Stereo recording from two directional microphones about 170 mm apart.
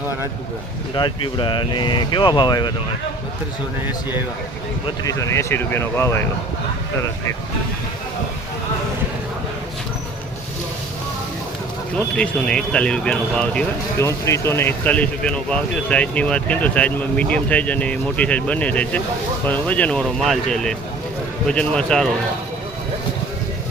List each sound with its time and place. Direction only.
0.9 s speech: 30° left (ahead or behind)
5.0 s speech: 20° left (ahead or behind)
11.9 s speech: 5° left (ahead or behind)
14.1 s speech: 15° left (ahead or behind)